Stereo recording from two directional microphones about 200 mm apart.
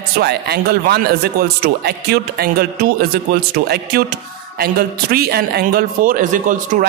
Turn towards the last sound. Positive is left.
turn(degrees=-40)  # may be behind; listen again after turning